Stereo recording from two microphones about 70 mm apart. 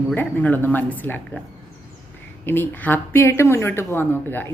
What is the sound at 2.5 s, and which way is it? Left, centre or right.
Speech, left.